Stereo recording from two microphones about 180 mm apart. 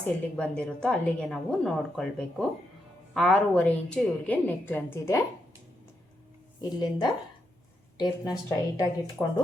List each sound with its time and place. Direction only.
0.0 s a woman's voice: 5° left (ahead or behind)
6.6 s a woman's voice: 25° left (ahead or behind)